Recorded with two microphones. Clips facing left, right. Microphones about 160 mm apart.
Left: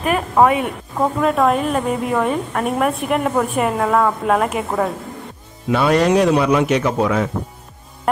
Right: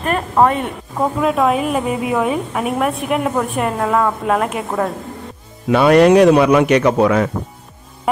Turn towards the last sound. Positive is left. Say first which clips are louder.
# right 4 dB
turn(degrees=-65)  # may be behind; listen again after turning